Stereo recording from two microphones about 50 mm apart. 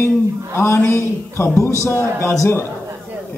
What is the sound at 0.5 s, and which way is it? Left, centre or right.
A man's voice, left.